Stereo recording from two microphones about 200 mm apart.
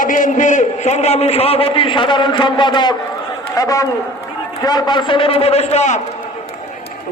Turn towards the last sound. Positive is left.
turn(degrees=35)  # may be behind; listen again after turning